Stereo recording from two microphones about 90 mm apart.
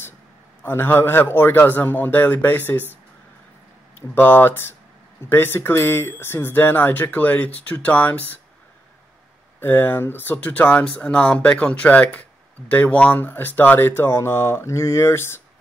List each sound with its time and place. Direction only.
0.7 s speech: 25° left (ahead or behind)
4.1 s speech: 25° left (ahead or behind)
9.6 s speech: 20° left (ahead or behind)